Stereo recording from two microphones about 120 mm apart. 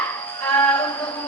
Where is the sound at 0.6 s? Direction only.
20° left (ahead or behind).